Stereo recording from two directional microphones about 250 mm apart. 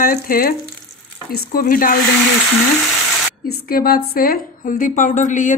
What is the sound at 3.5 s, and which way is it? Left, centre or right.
A woman's voice, left.